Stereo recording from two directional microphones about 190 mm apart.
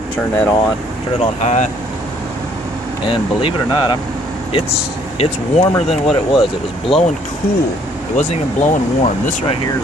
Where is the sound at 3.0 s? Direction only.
25° left (ahead or behind).